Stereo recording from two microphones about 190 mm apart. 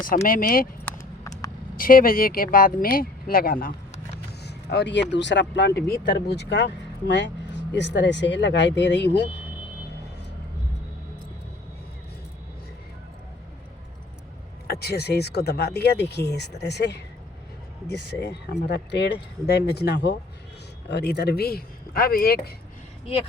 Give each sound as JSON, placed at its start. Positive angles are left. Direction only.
{"t": 0.3, "sound": "speech", "side_deg": 50}
{"t": 0.9, "sound": "vehicle", "side_deg": 15}
{"t": 1.7, "sound": "speech", "side_deg": 50}
{"t": 4.3, "sound": "speech", "side_deg": 60}
{"t": 14.7, "sound": "speech", "side_deg": 55}